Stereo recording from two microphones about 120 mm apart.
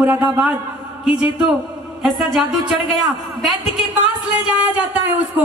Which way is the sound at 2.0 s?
Centre (ahead or behind).